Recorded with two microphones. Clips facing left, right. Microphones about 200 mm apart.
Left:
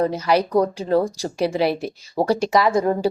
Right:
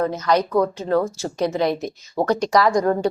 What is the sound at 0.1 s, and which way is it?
A woman's voice, 10° left (ahead or behind).